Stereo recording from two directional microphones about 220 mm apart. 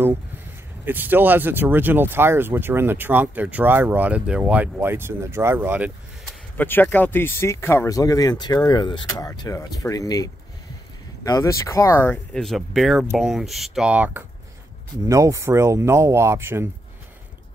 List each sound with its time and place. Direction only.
0.8 s speech: 10° right (ahead or behind)
6.5 s speech: 10° left (ahead or behind); by 16.6 s 10° right (ahead or behind)